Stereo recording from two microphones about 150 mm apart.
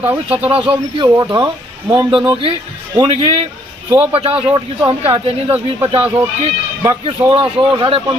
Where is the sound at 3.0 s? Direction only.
40° right (ahead or behind).